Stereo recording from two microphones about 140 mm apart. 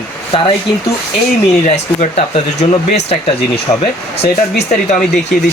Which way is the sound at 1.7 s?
55° left (ahead or behind).